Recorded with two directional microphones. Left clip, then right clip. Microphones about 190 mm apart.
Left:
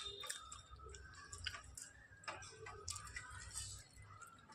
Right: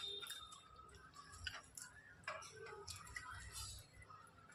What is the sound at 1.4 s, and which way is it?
Tick-tock, 15° left (ahead or behind).